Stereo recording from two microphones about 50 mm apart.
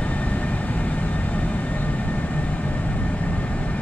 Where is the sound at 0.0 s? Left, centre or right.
Left.